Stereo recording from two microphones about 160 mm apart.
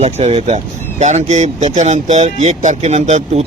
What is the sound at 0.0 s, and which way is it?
Speech, 40° right (ahead or behind).